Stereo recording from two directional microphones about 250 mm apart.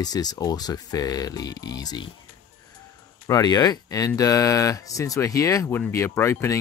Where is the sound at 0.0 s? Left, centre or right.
Centre.